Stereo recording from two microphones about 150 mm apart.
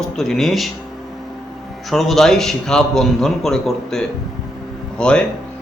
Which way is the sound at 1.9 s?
Centre (ahead or behind).